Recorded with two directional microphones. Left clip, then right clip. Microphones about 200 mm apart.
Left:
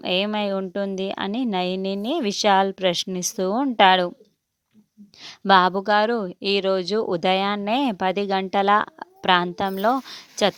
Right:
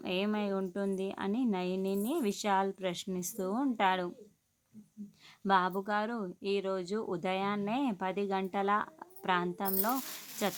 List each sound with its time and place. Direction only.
0.0 s speech: 45° left (ahead or behind)
5.2 s speech: 45° left (ahead or behind)